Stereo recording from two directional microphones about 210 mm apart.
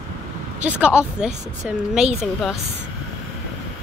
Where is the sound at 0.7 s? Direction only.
5° right (ahead or behind).